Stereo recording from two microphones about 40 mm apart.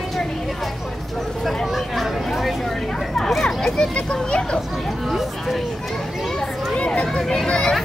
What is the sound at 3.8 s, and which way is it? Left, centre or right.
Speech, left.